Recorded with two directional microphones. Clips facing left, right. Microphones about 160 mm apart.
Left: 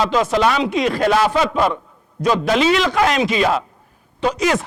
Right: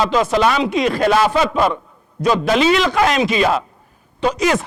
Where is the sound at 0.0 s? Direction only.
15° right (ahead or behind).